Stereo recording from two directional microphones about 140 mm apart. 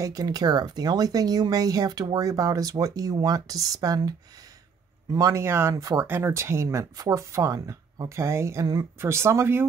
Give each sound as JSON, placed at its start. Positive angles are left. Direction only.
{"t": 0.0, "sound": "speech", "side_deg": -25}
{"t": 5.1, "sound": "speech", "side_deg": -20}